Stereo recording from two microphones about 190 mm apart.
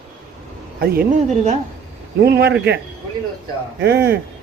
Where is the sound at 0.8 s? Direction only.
50° right (ahead or behind).